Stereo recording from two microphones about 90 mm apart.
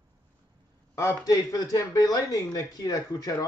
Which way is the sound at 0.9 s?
35° left (ahead or behind).